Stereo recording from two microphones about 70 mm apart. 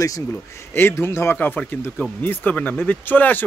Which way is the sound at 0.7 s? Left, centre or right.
Left.